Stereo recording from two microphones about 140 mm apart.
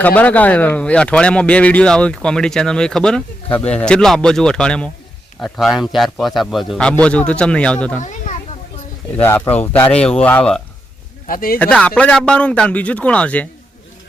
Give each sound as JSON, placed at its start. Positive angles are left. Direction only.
{"t": 0.0, "sound": "a man's voice", "side_deg": 10}
{"t": 9.1, "sound": "speech", "side_deg": 15}
{"t": 11.3, "sound": "speech", "side_deg": 90}
{"t": 11.6, "sound": "speech", "side_deg": 10}